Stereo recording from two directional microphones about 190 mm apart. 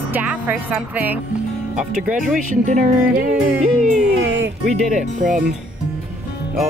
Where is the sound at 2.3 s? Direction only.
45° right (ahead or behind).